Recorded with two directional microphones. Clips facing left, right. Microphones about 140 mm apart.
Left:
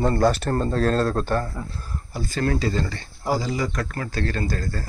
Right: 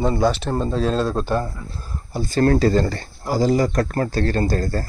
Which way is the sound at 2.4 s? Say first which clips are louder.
Right 7 dB; 45° right (ahead or behind).